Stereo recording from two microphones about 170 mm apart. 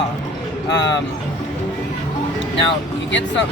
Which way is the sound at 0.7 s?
90° left.